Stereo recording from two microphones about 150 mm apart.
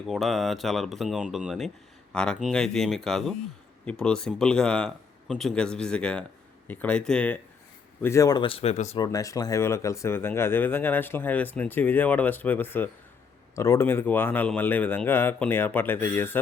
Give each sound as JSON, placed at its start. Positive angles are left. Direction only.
{"t": 0.1, "sound": "a man's voice", "side_deg": 0}
{"t": 8.0, "sound": "speech", "side_deg": 20}
{"t": 9.0, "sound": "speech", "side_deg": 20}